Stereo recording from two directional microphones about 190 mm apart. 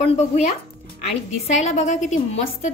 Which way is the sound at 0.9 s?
35° left (ahead or behind).